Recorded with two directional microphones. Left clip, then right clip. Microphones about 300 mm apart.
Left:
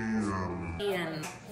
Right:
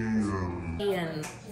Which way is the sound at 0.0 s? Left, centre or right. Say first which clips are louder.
Right 2 dB; right.